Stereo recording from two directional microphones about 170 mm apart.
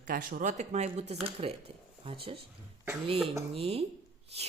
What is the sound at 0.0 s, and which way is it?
Speech, 55° right (ahead or behind).